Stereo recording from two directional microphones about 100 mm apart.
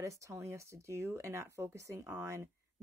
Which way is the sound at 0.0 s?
30° right (ahead or behind).